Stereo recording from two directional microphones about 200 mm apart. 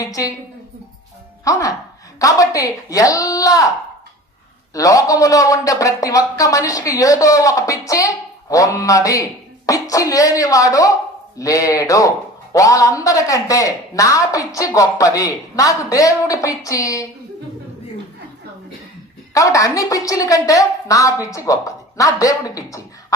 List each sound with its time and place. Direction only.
0.0 s a woman's voice: 15° left (ahead or behind)
1.5 s a woman's voice: 15° left (ahead or behind)
4.7 s a woman's voice: 15° left (ahead or behind)
19.3 s a woman's voice: 15° left (ahead or behind)